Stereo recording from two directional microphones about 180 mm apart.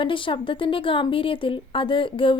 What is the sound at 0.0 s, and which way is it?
Speech, 30° left (ahead or behind).